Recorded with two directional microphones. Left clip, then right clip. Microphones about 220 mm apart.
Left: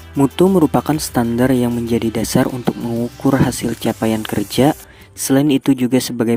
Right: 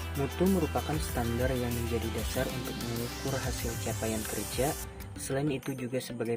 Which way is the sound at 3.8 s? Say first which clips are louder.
Left 16 dB; 50° left (ahead or behind).